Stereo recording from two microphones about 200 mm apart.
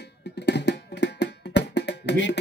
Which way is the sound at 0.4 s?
60° left (ahead or behind).